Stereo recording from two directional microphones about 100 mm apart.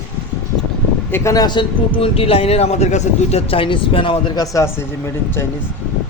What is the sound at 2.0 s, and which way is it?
Speech, 75° left (ahead or behind).